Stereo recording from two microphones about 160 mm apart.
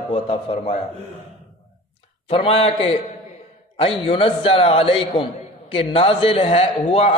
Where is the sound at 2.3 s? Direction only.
35° left (ahead or behind).